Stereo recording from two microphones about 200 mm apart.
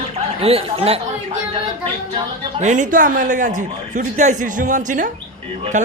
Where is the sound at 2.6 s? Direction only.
40° right (ahead or behind).